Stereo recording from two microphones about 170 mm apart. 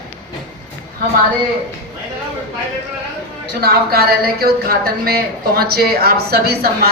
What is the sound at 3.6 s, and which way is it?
Speech, 65° right (ahead or behind).